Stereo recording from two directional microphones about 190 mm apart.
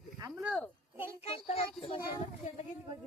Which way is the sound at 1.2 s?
30° left (ahead or behind).